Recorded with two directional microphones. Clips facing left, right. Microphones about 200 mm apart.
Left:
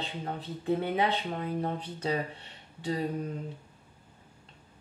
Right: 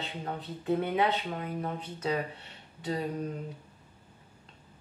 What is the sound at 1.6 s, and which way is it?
Speech, 30° left (ahead or behind).